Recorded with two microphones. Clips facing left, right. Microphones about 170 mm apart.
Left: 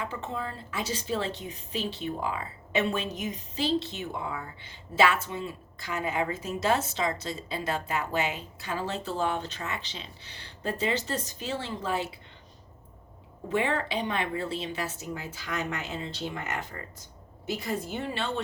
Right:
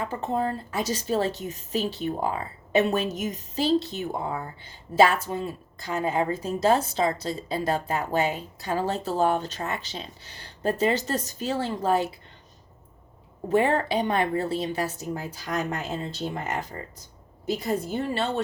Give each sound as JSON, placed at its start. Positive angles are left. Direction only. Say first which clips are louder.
{"t": 0.0, "sound": "a woman's voice", "louder": "right 7 dB", "side_deg": -40}
{"t": 13.5, "sound": "a woman's voice", "louder": "right 6 dB", "side_deg": -40}